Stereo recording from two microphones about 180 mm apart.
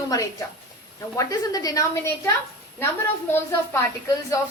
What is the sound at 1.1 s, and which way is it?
Speech, 20° left (ahead or behind).